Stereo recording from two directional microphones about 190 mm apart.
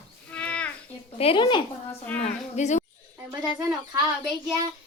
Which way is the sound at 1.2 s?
30° left (ahead or behind).